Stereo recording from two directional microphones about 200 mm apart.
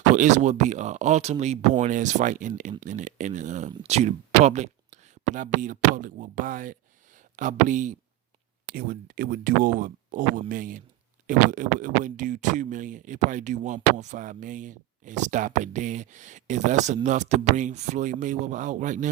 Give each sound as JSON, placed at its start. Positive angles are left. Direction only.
{"t": 0.1, "sound": "speech", "side_deg": -35}